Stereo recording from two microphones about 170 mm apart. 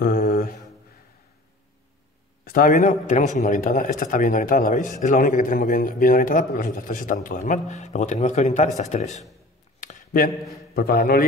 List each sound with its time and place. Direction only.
0.0 s mantra: 55° left (ahead or behind)
2.4 s a man's voice: 55° left (ahead or behind)
9.8 s a sound: 50° left (ahead or behind)
10.7 s a man's voice: 60° left (ahead or behind)